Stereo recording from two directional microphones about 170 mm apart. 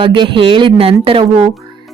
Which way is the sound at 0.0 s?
30° right (ahead or behind).